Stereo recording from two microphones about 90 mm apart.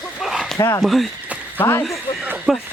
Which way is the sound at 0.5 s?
35° left (ahead or behind).